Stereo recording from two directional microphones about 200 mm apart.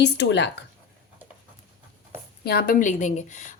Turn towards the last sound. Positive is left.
turn(degrees=35)  # may be behind; listen again after turning